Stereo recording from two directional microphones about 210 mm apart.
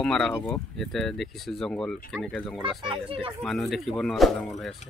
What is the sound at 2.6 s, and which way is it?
Speech, 25° right (ahead or behind).